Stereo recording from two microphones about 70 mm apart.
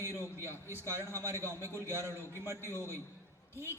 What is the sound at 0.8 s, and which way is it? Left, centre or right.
A man's voice, right.